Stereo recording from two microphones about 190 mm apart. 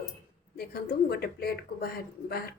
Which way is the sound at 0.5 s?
55° left (ahead or behind).